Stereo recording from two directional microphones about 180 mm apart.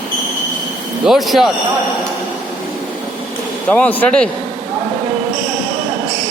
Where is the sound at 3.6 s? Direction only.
5° left (ahead or behind).